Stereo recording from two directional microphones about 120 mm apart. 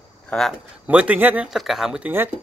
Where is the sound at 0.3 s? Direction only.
5° left (ahead or behind).